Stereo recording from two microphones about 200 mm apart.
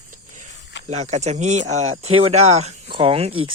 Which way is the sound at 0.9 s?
35° right (ahead or behind).